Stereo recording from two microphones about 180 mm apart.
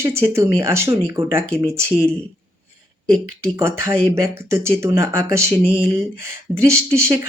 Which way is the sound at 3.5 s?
15° right (ahead or behind).